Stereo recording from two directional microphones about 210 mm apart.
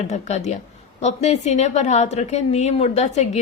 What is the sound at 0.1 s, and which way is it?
A woman's voice, 35° left (ahead or behind).